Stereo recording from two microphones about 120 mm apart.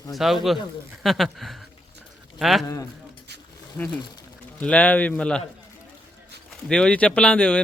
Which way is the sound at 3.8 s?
15° left (ahead or behind).